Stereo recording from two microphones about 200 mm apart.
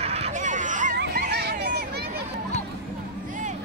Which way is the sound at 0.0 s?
30° right (ahead or behind).